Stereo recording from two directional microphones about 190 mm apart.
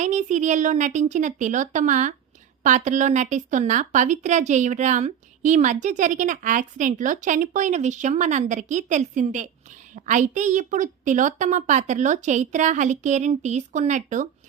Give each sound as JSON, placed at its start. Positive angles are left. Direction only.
{"t": 0.0, "sound": "speech", "side_deg": -40}